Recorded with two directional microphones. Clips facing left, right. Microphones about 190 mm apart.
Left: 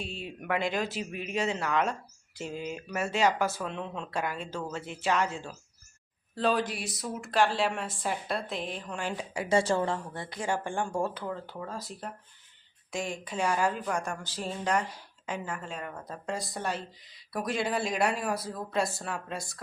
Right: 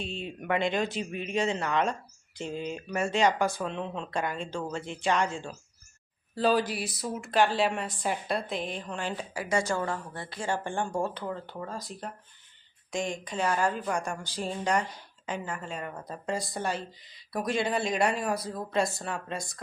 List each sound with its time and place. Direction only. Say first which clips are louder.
0.0 s speech: right 2 dB; 5° left (ahead or behind)
9.3 s a woman's voice: left 4 dB; 25° left (ahead or behind); by 19.5 s 5° left (ahead or behind)